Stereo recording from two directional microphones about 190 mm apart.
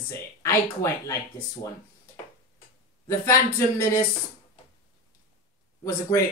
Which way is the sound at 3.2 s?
15° left (ahead or behind).